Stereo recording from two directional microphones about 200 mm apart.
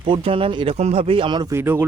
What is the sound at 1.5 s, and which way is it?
Speech, 10° right (ahead or behind).